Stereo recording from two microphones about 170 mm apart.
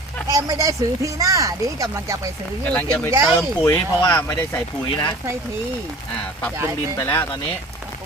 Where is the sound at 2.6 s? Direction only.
10° left (ahead or behind).